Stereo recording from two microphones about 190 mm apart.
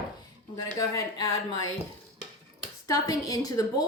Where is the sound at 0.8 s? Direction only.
15° left (ahead or behind).